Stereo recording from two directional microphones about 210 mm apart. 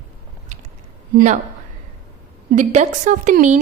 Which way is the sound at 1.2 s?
35° right (ahead or behind).